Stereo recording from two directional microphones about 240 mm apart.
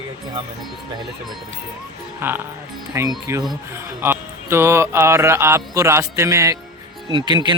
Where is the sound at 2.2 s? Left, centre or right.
Centre.